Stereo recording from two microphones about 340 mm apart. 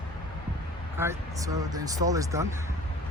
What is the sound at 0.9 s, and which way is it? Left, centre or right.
Speech, centre.